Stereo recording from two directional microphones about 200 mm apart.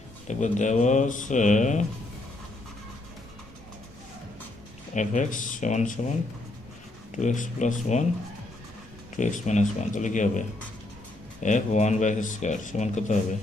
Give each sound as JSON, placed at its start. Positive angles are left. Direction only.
{"t": 0.3, "sound": "speech", "side_deg": 35}
{"t": 4.9, "sound": "speech", "side_deg": 40}
{"t": 7.2, "sound": "speech", "side_deg": 40}
{"t": 9.1, "sound": "speech", "side_deg": 40}
{"t": 11.4, "sound": "speech", "side_deg": 35}